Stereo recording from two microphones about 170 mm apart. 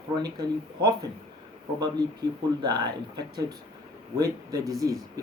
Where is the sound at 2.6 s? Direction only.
25° right (ahead or behind).